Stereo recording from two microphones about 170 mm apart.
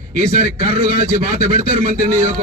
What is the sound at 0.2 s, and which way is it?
A man's voice, 50° right (ahead or behind).